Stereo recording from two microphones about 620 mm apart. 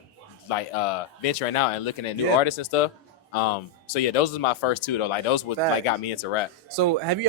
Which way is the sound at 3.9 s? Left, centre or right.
Left.